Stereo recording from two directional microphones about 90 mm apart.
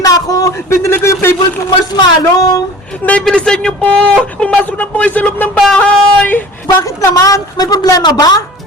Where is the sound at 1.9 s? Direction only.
45° left (ahead or behind).